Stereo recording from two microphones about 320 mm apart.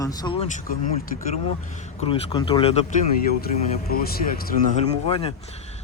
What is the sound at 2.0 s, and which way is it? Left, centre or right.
Speech, centre.